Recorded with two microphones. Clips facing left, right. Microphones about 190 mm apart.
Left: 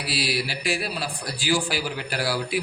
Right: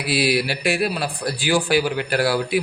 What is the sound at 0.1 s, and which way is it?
A man's voice, 60° right (ahead or behind).